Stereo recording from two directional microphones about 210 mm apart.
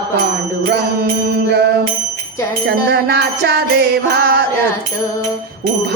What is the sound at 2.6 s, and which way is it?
Music, 50° right (ahead or behind).